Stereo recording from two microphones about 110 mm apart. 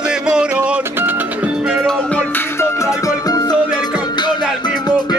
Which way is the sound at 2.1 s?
20° left (ahead or behind).